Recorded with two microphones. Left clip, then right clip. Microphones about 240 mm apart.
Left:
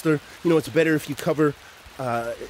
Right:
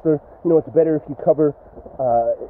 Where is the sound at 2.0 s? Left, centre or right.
Left.